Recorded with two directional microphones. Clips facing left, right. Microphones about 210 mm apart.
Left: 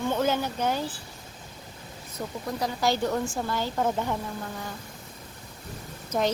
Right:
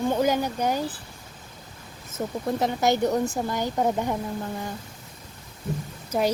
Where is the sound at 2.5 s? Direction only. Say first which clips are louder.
Right 3 dB; 20° right (ahead or behind).